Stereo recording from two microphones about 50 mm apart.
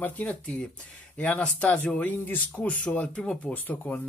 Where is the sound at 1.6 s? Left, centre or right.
Left.